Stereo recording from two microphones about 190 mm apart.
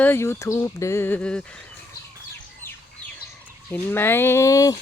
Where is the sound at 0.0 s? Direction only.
10° left (ahead or behind).